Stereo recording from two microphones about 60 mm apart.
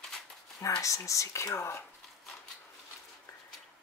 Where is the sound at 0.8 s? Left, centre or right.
Left.